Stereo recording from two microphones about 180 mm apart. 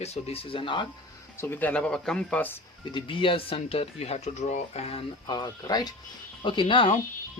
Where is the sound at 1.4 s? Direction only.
10° left (ahead or behind).